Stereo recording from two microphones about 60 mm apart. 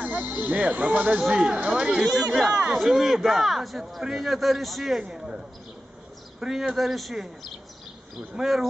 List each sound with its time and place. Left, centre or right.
0.0 s speech: right
1.2 s speech: centre
5.0 s speech: centre
6.4 s speech: centre
8.4 s speech: centre